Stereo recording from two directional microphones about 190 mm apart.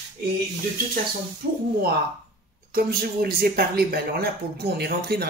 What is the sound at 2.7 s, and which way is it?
Speech, 55° right (ahead or behind).